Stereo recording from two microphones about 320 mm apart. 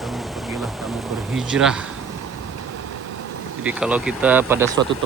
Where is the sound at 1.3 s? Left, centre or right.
Centre.